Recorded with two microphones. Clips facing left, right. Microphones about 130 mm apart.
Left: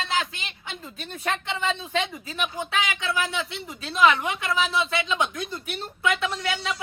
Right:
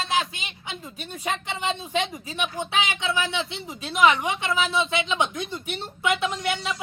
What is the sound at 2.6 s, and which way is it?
A woman's voice, 25° right (ahead or behind).